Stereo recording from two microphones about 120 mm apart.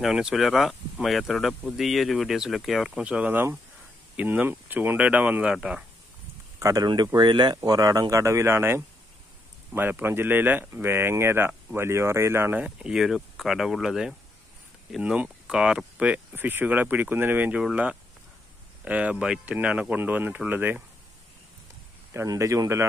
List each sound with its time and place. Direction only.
0.0 s speech: 5° right (ahead or behind)
6.6 s speech: 30° right (ahead or behind)
12.6 s speech: 5° right (ahead or behind)
22.1 s speech: 25° right (ahead or behind)